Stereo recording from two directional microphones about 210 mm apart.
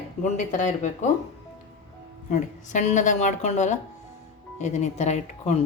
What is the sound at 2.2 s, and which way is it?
A woman's voice, 35° left (ahead or behind).